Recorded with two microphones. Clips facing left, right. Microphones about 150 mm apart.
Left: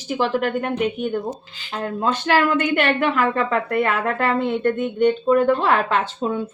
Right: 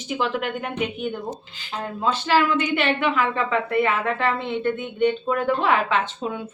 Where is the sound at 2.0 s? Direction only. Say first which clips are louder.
Left 1 dB; 55° left (ahead or behind).